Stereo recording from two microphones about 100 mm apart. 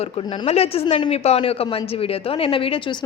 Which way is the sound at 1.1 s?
90° left.